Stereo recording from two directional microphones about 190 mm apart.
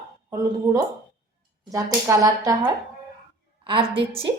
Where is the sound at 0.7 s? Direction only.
15° right (ahead or behind).